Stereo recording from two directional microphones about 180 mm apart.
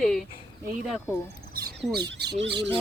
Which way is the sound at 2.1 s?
75° right (ahead or behind).